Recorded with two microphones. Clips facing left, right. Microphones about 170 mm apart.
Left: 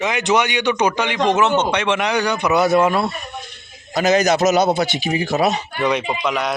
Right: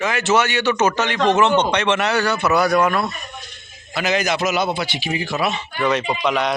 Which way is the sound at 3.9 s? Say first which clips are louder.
Left 5 dB; 40° left (ahead or behind).